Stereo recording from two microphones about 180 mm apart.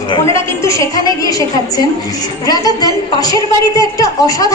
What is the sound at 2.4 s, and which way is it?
A woman's voice, 20° left (ahead or behind).